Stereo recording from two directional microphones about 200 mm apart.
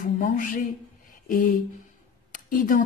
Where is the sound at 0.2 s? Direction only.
45° left (ahead or behind).